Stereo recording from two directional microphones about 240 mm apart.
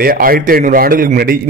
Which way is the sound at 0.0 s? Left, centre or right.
Right.